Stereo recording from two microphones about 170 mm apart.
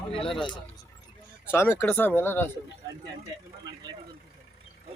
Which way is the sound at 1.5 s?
15° left (ahead or behind).